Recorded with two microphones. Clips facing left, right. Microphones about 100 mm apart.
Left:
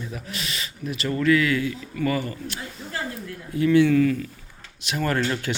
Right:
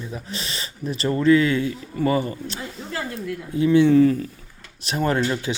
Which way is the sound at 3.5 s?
25° right (ahead or behind).